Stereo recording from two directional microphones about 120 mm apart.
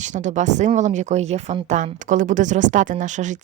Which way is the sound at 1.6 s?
90° right.